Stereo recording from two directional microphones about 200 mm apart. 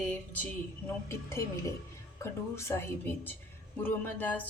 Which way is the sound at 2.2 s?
15° left (ahead or behind).